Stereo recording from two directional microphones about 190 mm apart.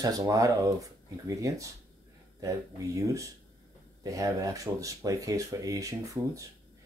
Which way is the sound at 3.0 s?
15° right (ahead or behind).